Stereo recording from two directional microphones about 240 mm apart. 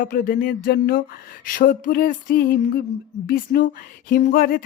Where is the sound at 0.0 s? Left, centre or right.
Left.